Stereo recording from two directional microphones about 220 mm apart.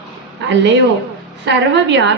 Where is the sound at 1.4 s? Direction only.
55° right (ahead or behind).